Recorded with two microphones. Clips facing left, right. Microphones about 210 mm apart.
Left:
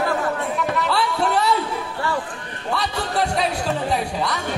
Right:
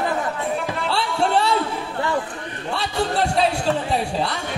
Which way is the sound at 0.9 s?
30° right (ahead or behind).